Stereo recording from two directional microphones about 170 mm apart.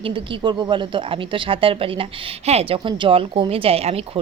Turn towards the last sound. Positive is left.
turn(degrees=-35)  # may be behind; listen again after turning